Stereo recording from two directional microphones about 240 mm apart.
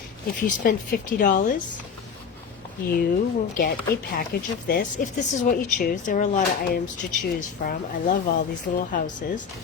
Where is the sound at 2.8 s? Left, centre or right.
Left.